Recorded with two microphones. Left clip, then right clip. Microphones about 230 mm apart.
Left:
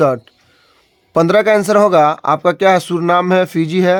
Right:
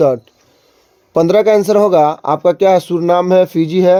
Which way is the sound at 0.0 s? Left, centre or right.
Centre.